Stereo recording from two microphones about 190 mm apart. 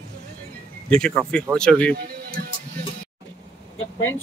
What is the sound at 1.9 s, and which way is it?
Music, 55° right (ahead or behind).